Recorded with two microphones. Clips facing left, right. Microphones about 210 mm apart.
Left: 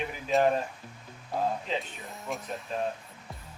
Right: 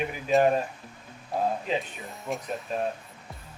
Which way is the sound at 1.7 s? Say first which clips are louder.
Right 4 dB; 15° right (ahead or behind).